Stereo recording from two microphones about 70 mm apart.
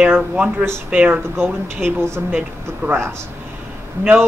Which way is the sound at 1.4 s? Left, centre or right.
Right.